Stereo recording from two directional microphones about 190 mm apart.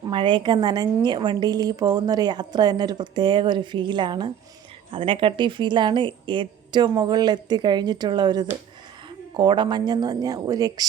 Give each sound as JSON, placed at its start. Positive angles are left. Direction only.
{"t": 0.1, "sound": "a woman's voice", "side_deg": -25}